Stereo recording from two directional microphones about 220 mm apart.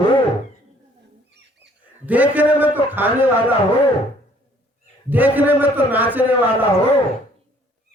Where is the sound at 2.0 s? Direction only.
5° right (ahead or behind).